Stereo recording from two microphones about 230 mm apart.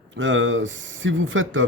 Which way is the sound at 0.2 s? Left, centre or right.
Right.